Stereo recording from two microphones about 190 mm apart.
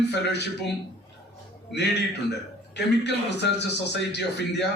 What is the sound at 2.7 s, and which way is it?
A man's voice, 65° left (ahead or behind).